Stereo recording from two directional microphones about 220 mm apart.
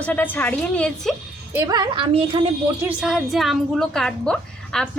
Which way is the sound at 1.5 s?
15° right (ahead or behind).